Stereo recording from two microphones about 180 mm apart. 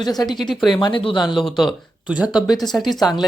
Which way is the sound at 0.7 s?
25° left (ahead or behind).